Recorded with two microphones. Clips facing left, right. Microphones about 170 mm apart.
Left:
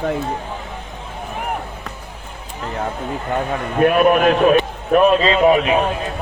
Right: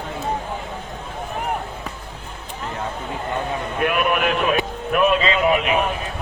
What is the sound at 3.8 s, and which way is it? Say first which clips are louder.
A man's voice: left 8 dB; 40° left (ahead or behind).